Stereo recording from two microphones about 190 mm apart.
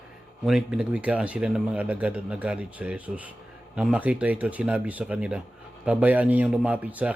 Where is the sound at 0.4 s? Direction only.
5° right (ahead or behind).